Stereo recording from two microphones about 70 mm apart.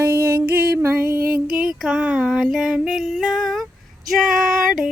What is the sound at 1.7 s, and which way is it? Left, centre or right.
Female singing, centre.